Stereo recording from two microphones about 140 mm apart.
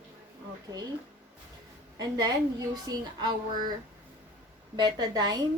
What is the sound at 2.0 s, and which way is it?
A woman's voice, 30° right (ahead or behind).